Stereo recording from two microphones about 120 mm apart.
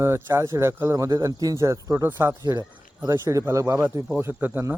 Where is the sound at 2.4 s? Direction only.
30° right (ahead or behind); by 4.8 s 15° right (ahead or behind).